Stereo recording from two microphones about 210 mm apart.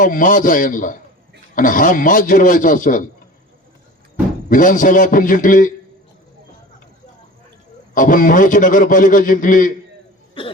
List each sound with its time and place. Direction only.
0.0 s a man's voice: 40° left (ahead or behind)
4.4 s a man's voice: 40° left (ahead or behind)
7.9 s a man's voice: 40° left (ahead or behind)